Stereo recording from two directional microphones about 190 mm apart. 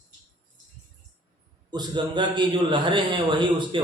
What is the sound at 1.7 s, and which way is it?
A man's voice, 25° right (ahead or behind).